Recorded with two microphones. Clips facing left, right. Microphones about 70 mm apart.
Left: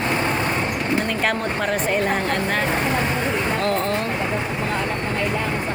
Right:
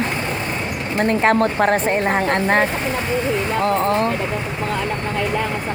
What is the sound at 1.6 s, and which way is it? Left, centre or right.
A woman's voice, right.